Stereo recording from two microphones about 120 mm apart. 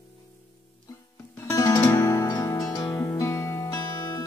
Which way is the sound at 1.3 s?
25° left (ahead or behind).